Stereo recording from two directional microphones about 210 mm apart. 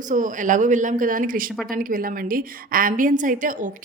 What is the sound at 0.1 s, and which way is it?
A woman's voice, 40° right (ahead or behind).